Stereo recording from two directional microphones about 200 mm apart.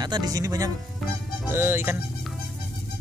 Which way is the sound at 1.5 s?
10° right (ahead or behind).